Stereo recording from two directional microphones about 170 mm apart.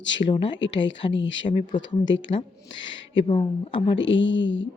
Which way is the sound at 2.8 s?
90° left.